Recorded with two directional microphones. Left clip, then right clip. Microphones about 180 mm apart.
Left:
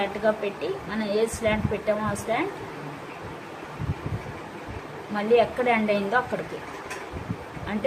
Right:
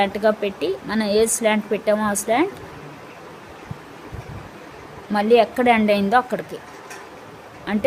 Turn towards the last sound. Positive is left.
turn(degrees=-65)  # may be behind; listen again after turning